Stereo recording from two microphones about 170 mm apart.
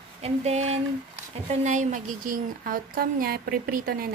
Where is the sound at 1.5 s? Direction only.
45° right (ahead or behind).